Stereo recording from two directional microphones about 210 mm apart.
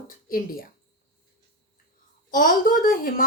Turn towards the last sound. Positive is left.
turn(degrees=40)  # may be behind; listen again after turning